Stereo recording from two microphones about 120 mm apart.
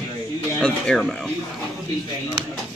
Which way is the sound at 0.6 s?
5° left (ahead or behind).